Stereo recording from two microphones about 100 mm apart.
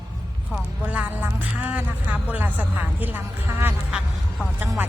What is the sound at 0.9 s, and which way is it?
Speech, 15° right (ahead or behind).